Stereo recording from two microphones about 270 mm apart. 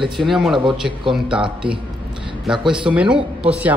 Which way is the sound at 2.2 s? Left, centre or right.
Centre.